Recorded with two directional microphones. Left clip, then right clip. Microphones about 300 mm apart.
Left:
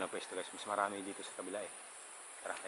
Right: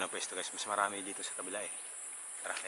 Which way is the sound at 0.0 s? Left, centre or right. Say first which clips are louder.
Right 2 dB; centre.